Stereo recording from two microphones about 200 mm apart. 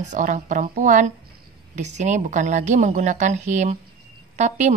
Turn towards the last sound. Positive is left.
turn(degrees=-35)  # may be behind; listen again after turning